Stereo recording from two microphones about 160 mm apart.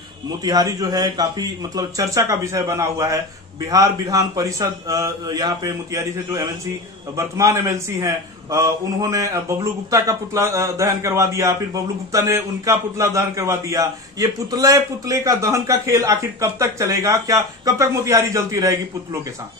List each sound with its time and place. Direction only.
0.4 s a man's voice: 25° right (ahead or behind)